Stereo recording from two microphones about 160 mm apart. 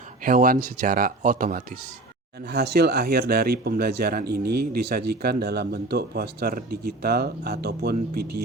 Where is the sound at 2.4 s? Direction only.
90° right.